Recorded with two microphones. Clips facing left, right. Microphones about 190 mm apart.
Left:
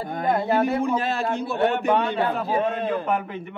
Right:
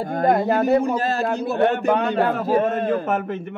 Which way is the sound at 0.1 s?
45° right (ahead or behind).